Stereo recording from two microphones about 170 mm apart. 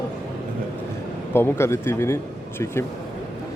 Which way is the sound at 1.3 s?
15° left (ahead or behind).